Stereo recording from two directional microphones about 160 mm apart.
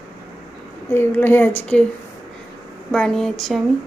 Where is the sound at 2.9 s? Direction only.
5° left (ahead or behind).